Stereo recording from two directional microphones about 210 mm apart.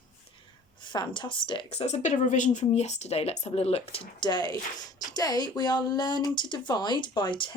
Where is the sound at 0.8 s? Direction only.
20° left (ahead or behind).